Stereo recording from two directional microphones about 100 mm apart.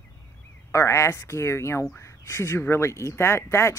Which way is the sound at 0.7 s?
30° left (ahead or behind).